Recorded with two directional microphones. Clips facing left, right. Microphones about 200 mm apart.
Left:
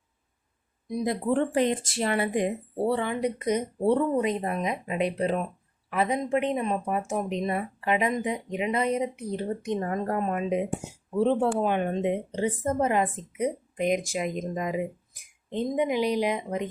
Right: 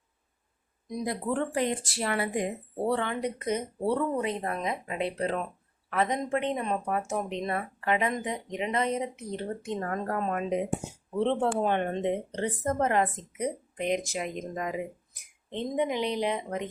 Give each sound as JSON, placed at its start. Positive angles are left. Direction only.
{"t": 1.0, "sound": "a woman's voice", "side_deg": 25}
{"t": 2.7, "sound": "speech", "side_deg": 5}